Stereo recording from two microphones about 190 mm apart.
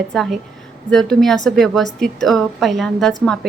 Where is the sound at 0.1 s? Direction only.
Centre (ahead or behind).